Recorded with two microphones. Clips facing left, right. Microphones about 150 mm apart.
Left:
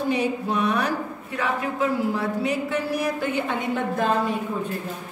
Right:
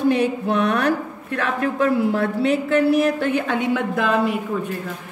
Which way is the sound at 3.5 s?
85° right.